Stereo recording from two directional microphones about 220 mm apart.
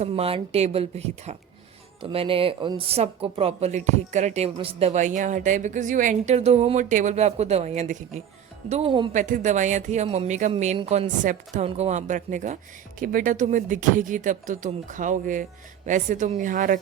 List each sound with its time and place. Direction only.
0.0 s a woman's voice: 25° right (ahead or behind)